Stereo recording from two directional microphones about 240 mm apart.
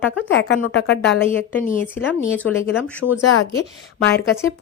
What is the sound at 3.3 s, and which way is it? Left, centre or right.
Speech, left.